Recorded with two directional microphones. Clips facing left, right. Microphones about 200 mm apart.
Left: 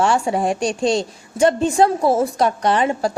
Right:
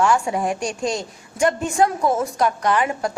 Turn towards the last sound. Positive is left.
turn(degrees=30)  # may be behind; listen again after turning